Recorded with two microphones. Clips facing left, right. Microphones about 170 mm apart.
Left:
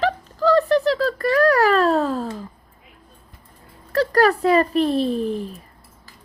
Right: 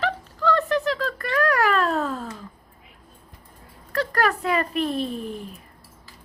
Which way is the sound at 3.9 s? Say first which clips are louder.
Left 6 dB; 35° left (ahead or behind).